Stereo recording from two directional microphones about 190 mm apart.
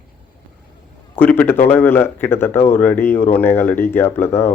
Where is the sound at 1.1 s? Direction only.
10° left (ahead or behind).